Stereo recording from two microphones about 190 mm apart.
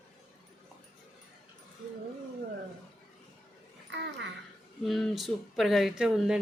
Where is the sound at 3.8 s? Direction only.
65° right (ahead or behind).